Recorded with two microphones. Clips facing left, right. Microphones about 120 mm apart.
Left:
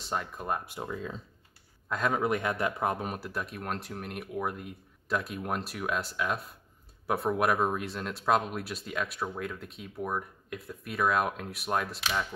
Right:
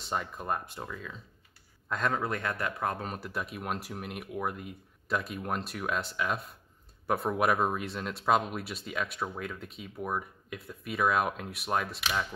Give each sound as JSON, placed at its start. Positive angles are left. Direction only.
{"t": 0.0, "sound": "speech", "side_deg": 0}
{"t": 0.7, "sound": "speech", "side_deg": 25}
{"t": 1.9, "sound": "speech", "side_deg": 5}